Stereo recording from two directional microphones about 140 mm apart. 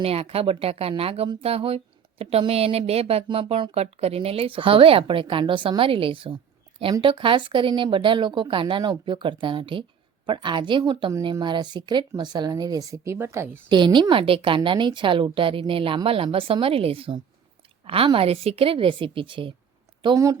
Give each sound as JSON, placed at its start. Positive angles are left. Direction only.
{"t": 0.0, "sound": "speech", "side_deg": -45}
{"t": 13.7, "sound": "speech", "side_deg": -35}
{"t": 20.1, "sound": "speech", "side_deg": -25}